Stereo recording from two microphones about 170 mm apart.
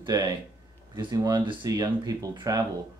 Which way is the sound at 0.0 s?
20° right (ahead or behind).